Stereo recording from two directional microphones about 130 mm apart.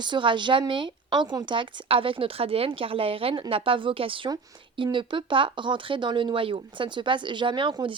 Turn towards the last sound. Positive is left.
turn(degrees=-40)  # may be behind; listen again after turning